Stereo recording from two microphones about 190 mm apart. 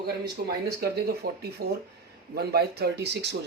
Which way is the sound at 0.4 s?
45° right (ahead or behind).